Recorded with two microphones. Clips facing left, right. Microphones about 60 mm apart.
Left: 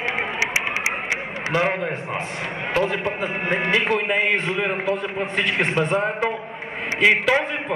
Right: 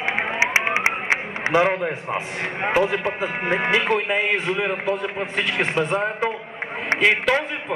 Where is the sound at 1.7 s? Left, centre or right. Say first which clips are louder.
Right 1 dB; centre.